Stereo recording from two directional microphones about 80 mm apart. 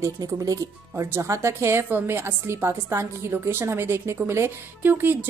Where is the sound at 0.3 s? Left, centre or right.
Right.